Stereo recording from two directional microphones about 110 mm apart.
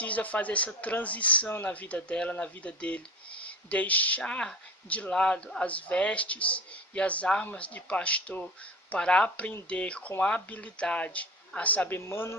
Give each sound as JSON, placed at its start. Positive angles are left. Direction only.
{"t": 0.0, "sound": "speech", "side_deg": 15}